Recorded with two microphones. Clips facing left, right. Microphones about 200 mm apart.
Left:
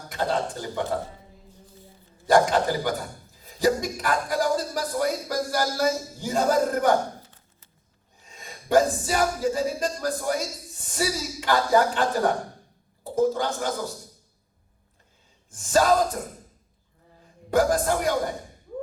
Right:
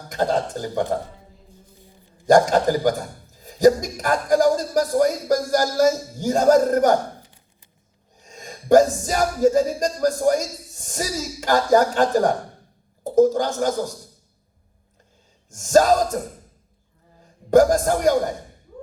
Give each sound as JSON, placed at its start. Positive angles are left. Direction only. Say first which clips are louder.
{"t": 0.1, "sound": "speech", "louder": "right 4 dB", "side_deg": -45}
{"t": 2.2, "sound": "speech", "louder": "right 4 dB", "side_deg": -45}
{"t": 7.2, "sound": "a sound", "louder": "right 1 dB", "side_deg": -15}
{"t": 8.2, "sound": "speech", "louder": "right 6 dB", "side_deg": -45}
{"t": 15.4, "sound": "speech", "louder": "right 5 dB", "side_deg": -45}
{"t": 17.5, "sound": "speech", "louder": "right 6 dB", "side_deg": -45}